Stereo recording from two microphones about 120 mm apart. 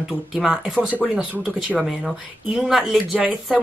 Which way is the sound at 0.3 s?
5° right (ahead or behind).